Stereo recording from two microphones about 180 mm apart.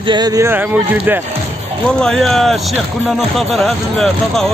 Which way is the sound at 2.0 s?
Centre (ahead or behind).